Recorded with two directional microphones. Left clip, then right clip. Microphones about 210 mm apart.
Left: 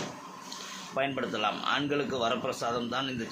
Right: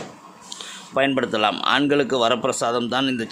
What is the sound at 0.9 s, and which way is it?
Speech, 50° right (ahead or behind).